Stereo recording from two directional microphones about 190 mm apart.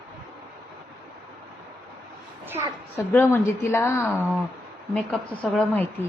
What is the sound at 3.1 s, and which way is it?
Speech, 10° left (ahead or behind).